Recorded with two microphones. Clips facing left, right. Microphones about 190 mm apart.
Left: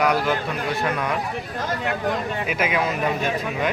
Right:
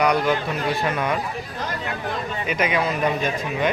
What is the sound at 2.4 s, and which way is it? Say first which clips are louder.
Speech: right 2 dB; 5° left (ahead or behind).